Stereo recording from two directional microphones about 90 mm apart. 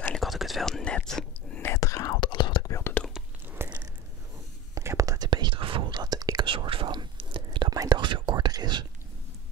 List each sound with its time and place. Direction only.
0.1 s whispering: centre (ahead or behind)
1.8 s whispering: 35° left (ahead or behind)
2.1 s whispering: 60° left (ahead or behind)
2.6 s whispering: 35° left (ahead or behind)
3.6 s a sound: 25° right (ahead or behind)
4.7 s whispering: 35° right (ahead or behind)
5.3 s whispering: 60° right (ahead or behind); by 6.4 s 45° right (ahead or behind)
6.4 s whispering: 65° right (ahead or behind)
7.7 s whispering: 45° right (ahead or behind)
8.0 s whispering: 60° right (ahead or behind)